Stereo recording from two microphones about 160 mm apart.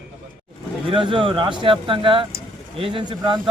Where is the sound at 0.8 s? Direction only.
30° right (ahead or behind).